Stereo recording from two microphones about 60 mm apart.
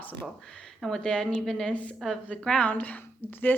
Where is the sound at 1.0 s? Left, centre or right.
Centre.